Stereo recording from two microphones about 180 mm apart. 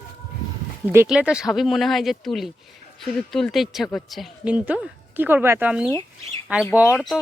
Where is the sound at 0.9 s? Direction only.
10° right (ahead or behind).